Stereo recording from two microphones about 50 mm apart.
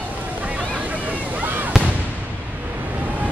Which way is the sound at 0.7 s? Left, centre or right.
Right.